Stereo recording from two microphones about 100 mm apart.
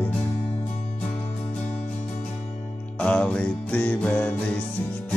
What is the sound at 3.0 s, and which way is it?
Music, 10° left (ahead or behind).